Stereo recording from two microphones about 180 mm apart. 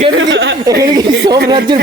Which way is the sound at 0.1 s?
90° right.